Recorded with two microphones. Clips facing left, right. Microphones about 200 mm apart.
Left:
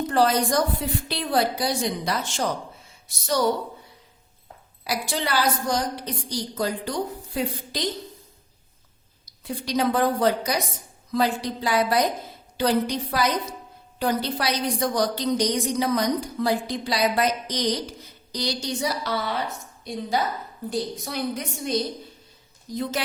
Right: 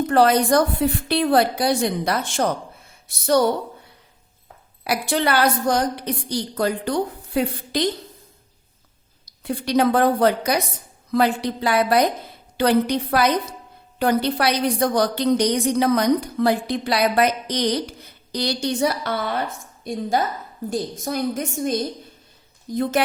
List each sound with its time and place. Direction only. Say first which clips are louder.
0.1 s a woman's voice: right 5 dB; 60° right (ahead or behind)
4.8 s a woman's voice: right 6 dB; 60° right (ahead or behind)
9.4 s a woman's voice: right 5 dB; 60° right (ahead or behind)